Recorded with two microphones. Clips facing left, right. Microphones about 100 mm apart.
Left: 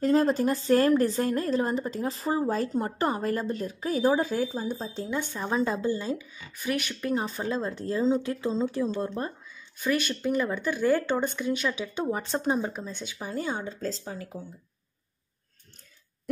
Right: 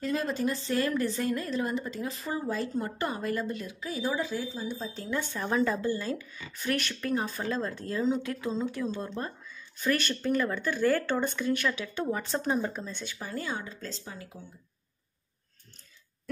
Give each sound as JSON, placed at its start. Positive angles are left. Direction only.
{"t": 0.0, "sound": "speech", "side_deg": 35}
{"t": 4.7, "sound": "speech", "side_deg": 30}
{"t": 9.8, "sound": "speech", "side_deg": 15}